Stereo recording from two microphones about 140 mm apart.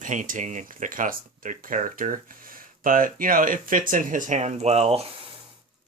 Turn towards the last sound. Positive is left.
turn(degrees=-45)  # may be behind; listen again after turning